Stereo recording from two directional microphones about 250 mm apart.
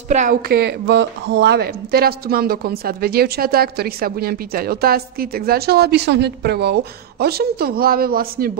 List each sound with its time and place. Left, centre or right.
0.1 s a woman's voice: right